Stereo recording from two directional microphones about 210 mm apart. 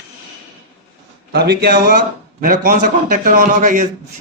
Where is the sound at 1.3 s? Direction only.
50° right (ahead or behind).